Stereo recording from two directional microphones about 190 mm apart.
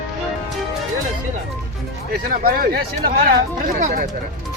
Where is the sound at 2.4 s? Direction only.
50° right (ahead or behind).